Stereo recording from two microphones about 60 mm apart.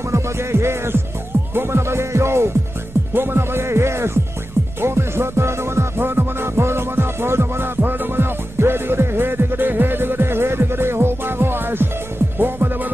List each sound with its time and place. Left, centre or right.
0.1 s music: right
3.1 s speech: right
4.8 s music: right